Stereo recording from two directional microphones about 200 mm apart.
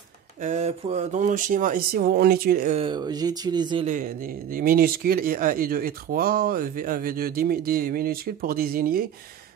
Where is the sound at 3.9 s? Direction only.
40° right (ahead or behind).